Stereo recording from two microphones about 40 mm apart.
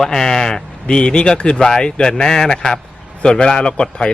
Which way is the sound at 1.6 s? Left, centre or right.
Centre.